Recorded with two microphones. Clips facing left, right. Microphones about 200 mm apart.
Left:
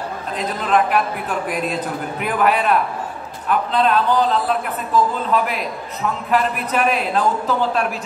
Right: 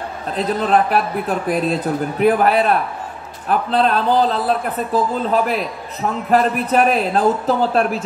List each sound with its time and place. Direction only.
0.4 s a man's voice: 35° right (ahead or behind)
6.3 s a man's voice: 40° right (ahead or behind)